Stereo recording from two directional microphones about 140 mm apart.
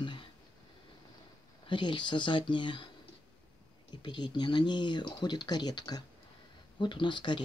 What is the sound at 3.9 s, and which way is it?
Speech, 35° left (ahead or behind).